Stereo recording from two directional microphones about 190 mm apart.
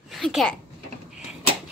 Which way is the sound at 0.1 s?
Centre (ahead or behind).